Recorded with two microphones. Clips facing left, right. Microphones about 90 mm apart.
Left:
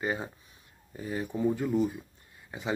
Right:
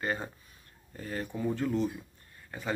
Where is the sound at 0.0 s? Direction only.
10° left (ahead or behind).